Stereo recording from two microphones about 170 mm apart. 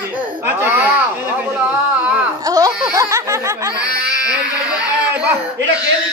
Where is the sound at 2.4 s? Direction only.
20° right (ahead or behind).